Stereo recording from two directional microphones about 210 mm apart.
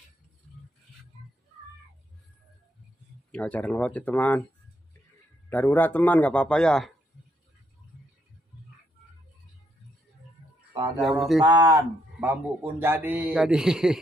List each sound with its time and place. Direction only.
3.3 s a man's voice: 5° left (ahead or behind)
5.5 s a man's voice: 10° left (ahead or behind)
10.7 s speech: 20° right (ahead or behind); by 13.9 s 5° right (ahead or behind)